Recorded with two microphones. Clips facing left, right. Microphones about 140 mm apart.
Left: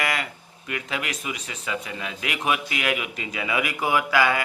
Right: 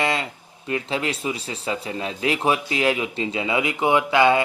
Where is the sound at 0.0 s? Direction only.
25° right (ahead or behind).